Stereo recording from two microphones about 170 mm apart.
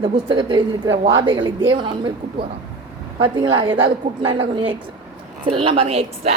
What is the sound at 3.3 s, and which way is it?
A woman's voice, 30° right (ahead or behind).